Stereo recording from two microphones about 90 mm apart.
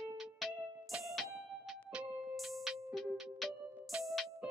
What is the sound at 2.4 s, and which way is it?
Music, centre (ahead or behind).